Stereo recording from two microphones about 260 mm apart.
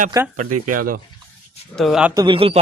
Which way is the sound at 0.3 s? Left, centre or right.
Right.